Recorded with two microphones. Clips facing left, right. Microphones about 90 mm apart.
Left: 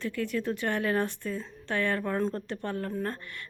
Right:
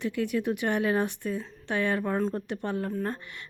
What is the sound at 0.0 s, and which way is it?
Speech, 15° right (ahead or behind).